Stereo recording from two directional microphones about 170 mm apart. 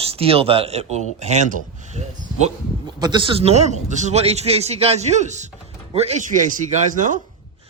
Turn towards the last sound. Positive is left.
turn(degrees=-50)  # may be behind; listen again after turning